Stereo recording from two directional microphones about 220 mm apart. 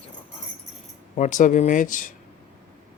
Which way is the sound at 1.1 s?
35° left (ahead or behind).